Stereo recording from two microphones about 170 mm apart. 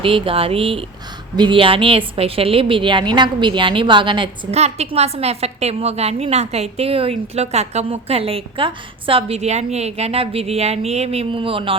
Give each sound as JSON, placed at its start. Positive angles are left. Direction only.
{"t": 0.0, "sound": "a woman's voice", "side_deg": -30}